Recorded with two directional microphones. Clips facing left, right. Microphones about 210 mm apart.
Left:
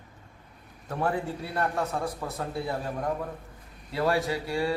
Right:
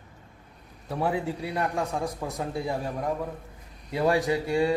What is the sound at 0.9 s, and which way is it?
A man's voice, 10° right (ahead or behind).